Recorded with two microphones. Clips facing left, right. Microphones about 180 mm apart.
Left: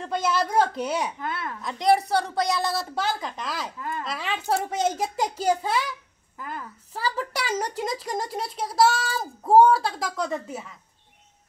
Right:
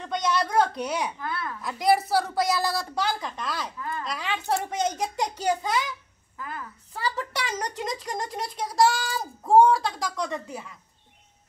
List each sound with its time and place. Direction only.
0.0 s speech: 5° left (ahead or behind)
1.2 s speech: 20° left (ahead or behind)
1.6 s speech: 5° right (ahead or behind)
6.9 s speech: 5° left (ahead or behind)